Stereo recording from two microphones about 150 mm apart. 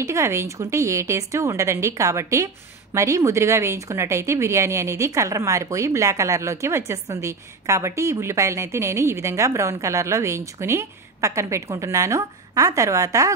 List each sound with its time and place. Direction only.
0.0 s a woman's voice: 20° right (ahead or behind)